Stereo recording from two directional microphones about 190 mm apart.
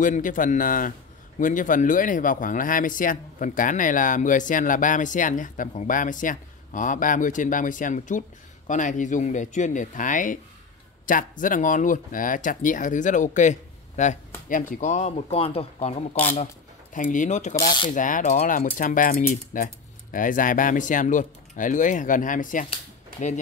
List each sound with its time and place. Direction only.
0.0 s speech: 45° left (ahead or behind)
16.9 s speech: 45° left (ahead or behind)
17.6 s speech: 25° left (ahead or behind)
17.9 s speech: 45° left (ahead or behind)